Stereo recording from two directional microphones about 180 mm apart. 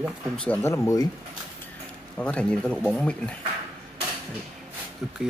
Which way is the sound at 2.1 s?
5° left (ahead or behind).